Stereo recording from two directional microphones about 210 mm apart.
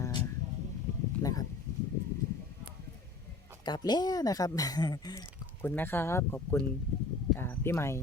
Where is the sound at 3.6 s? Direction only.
20° left (ahead or behind).